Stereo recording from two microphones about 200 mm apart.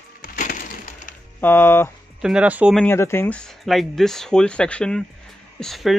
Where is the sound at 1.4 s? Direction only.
10° left (ahead or behind).